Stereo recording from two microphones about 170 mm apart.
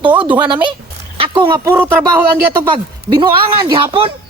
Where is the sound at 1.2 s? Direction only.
25° right (ahead or behind).